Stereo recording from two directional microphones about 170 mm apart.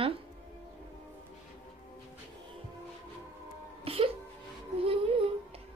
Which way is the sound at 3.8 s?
35° right (ahead or behind).